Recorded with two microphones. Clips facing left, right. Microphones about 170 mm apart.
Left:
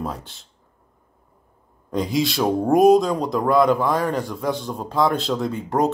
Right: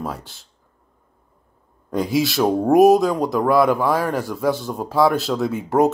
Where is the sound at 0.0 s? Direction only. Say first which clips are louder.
Even; centre (ahead or behind).